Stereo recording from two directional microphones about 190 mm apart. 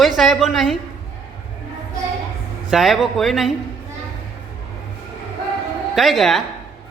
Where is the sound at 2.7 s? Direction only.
Centre (ahead or behind).